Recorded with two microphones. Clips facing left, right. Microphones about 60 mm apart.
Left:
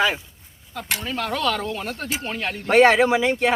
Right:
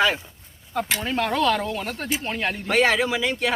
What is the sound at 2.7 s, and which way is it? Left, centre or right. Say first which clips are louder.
Speech: left 6 dB; left.